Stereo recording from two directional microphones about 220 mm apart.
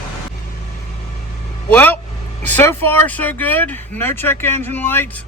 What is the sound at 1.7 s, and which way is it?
Speech, 10° left (ahead or behind).